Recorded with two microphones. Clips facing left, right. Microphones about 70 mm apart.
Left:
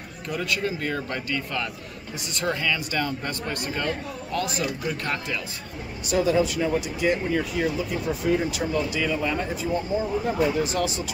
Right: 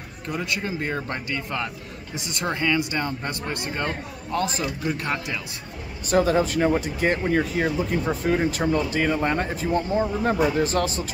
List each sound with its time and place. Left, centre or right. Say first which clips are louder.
0.3 s speech: left 1 dB; right
6.0 s speech: right 2 dB; right